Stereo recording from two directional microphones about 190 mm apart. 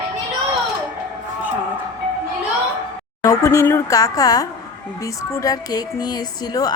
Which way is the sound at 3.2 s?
15° left (ahead or behind).